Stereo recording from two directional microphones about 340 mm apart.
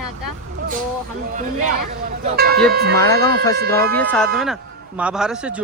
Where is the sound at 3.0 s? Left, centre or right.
Centre.